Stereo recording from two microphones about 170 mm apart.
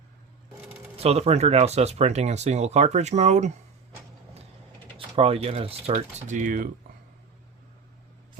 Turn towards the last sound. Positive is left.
turn(degrees=-50)  # may be behind; listen again after turning